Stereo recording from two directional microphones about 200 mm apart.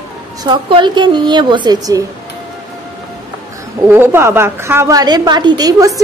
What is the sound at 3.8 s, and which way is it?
A woman's voice, 10° right (ahead or behind).